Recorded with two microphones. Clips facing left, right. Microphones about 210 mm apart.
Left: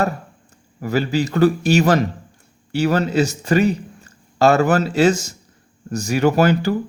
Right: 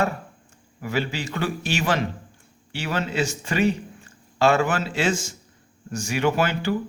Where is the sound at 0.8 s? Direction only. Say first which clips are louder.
Left 7 dB; 40° left (ahead or behind).